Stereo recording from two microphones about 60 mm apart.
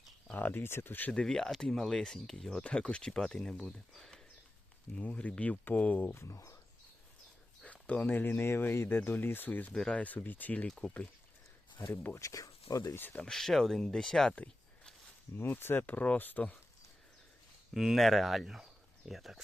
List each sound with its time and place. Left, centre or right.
0.3 s speech: left
1.1 s speech: centre
6.1 s speech: left
7.6 s speech: left
9.7 s speech: centre
10.0 s speech: left
10.7 s speech: centre
12.1 s speech: left
13.0 s speech: left
13.2 s speech: centre
15.4 s speech: left
17.7 s speech: centre